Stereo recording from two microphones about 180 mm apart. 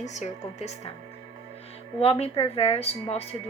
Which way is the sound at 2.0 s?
35° left (ahead or behind).